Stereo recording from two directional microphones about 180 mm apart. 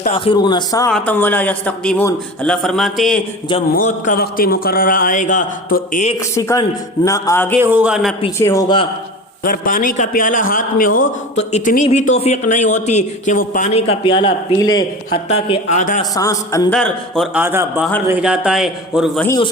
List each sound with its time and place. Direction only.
0.1 s a man's voice: 30° left (ahead or behind)
0.9 s a man's voice: 10° left (ahead or behind)
3.5 s a man's voice: 25° left (ahead or behind)
3.8 s a man's voice: 45° left (ahead or behind)
6.1 s a man's voice: 15° left (ahead or behind)
7.6 s speech: 10° right (ahead or behind)
8.4 s a man's voice: 15° left (ahead or behind)
9.4 s a man's voice: 50° left (ahead or behind)
13.8 s a man's voice: 30° left (ahead or behind)
15.3 s a man's voice: 40° left (ahead or behind)
16.1 s a man's voice: 20° left (ahead or behind)
16.7 s a man's voice: 5° left (ahead or behind)
17.3 s a man's voice: 10° right (ahead or behind)